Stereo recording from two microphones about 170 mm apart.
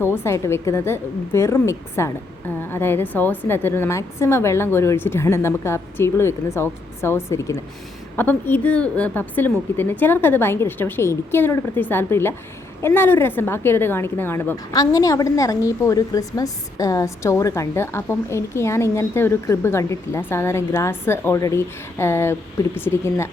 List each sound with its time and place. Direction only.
0.0 s a woman's voice: 15° left (ahead or behind)